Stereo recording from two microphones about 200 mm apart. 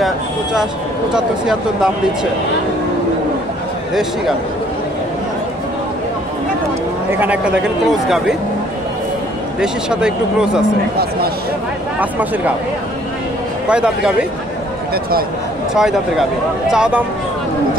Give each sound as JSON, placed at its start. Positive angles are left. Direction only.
{"t": 0.0, "sound": "speech", "side_deg": 0}
{"t": 7.1, "sound": "speech", "side_deg": -10}
{"t": 9.6, "sound": "speech", "side_deg": -5}
{"t": 12.0, "sound": "speech", "side_deg": -10}
{"t": 13.7, "sound": "speech", "side_deg": -5}
{"t": 15.7, "sound": "speech", "side_deg": 0}